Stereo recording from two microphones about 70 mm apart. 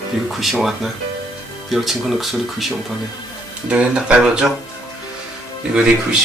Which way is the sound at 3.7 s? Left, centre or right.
Centre.